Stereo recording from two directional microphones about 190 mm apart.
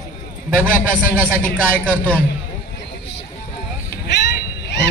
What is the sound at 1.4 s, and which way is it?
Speech, 10° left (ahead or behind).